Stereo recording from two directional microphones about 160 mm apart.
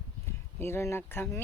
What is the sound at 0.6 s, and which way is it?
Speech, 15° left (ahead or behind).